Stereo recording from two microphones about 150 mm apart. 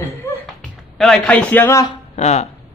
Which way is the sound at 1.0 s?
5° left (ahead or behind).